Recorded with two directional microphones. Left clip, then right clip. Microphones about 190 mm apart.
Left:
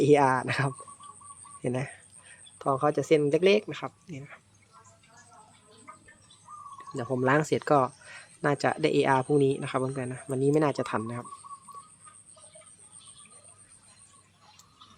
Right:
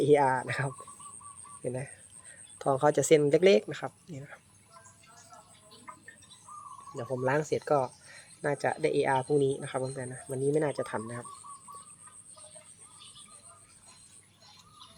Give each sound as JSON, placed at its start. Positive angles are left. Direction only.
{"t": 0.0, "sound": "speech", "side_deg": 20}
{"t": 2.6, "sound": "speech", "side_deg": 5}
{"t": 7.2, "sound": "speech", "side_deg": 30}